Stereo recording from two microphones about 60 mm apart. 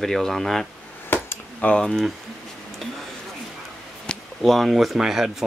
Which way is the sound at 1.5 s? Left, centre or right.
Left.